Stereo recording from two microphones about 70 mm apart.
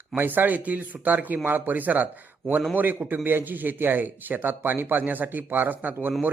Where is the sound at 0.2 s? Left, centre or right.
Right.